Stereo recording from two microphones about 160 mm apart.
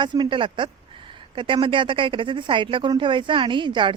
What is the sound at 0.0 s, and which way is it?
Speech, 30° right (ahead or behind).